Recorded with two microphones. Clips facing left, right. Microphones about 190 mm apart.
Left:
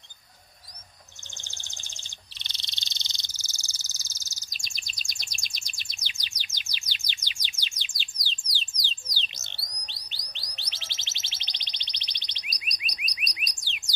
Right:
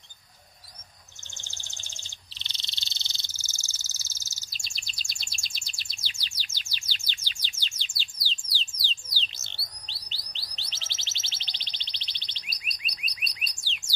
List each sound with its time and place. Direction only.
1.4 s frog: 15° left (ahead or behind)
8.5 s a sound: 15° left (ahead or behind)
9.1 s bird: 15° left (ahead or behind)